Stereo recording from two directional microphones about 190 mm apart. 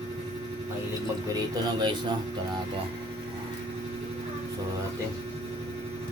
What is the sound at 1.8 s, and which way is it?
Speech, 25° right (ahead or behind).